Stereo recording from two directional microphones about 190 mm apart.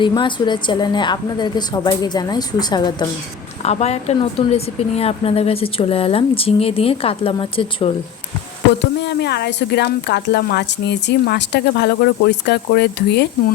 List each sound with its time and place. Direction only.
0.0 s a woman's voice: 25° left (ahead or behind)
3.6 s a woman's voice: 35° left (ahead or behind)
8.8 s speech: 60° left (ahead or behind)